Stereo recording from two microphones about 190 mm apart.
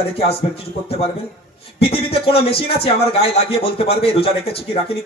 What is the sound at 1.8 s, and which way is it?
A man's voice, 30° left (ahead or behind).